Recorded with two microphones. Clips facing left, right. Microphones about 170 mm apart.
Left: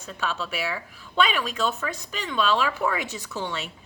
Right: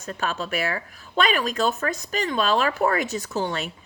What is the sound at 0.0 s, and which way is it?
A woman's voice, 50° right (ahead or behind).